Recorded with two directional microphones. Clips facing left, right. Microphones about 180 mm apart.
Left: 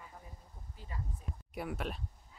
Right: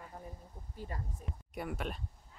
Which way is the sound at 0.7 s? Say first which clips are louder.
Right 4 dB; 45° right (ahead or behind).